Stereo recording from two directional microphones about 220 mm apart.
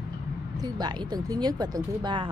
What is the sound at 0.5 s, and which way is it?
Speech, 20° right (ahead or behind).